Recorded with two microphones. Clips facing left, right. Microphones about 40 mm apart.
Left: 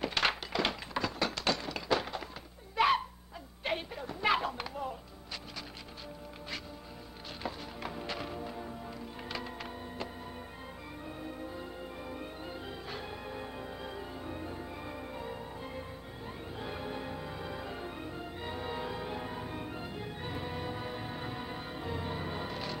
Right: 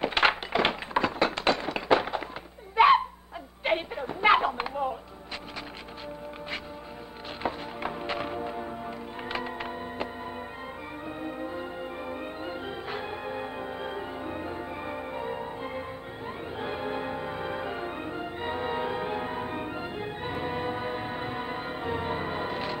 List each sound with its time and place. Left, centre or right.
0.0 s thunk: right
2.7 s a sound: right
7.4 s music: right
11.1 s music: right